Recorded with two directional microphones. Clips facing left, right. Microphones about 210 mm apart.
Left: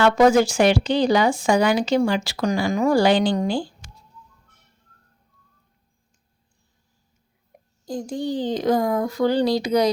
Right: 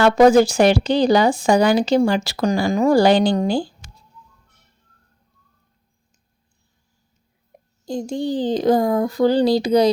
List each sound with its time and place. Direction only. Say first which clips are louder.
0.0 s speech: right 3 dB; 35° right (ahead or behind)
7.9 s speech: right 3 dB; 25° right (ahead or behind)